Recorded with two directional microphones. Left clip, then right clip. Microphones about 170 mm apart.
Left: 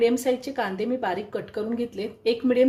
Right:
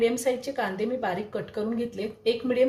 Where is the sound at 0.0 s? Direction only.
50° left (ahead or behind).